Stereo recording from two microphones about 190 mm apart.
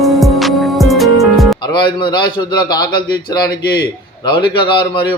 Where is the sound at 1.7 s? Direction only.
25° left (ahead or behind).